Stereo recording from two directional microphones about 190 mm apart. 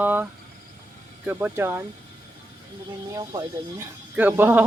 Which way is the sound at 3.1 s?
20° right (ahead or behind).